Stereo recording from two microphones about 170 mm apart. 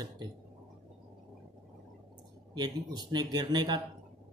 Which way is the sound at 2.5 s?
25° right (ahead or behind).